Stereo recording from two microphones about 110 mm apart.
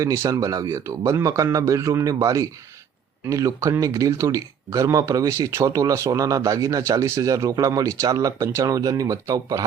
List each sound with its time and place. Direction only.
0.0 s speech: 30° right (ahead or behind)